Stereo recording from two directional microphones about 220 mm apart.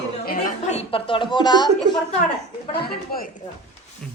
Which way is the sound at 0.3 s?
35° left (ahead or behind).